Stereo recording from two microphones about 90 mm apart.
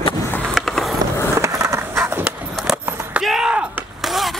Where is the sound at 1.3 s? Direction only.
35° right (ahead or behind).